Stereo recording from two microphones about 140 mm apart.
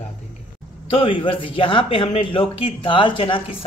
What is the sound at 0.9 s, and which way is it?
A man's voice, 40° left (ahead or behind).